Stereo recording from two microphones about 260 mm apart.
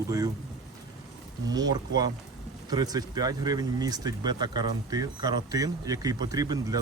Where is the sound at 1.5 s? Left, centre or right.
Centre.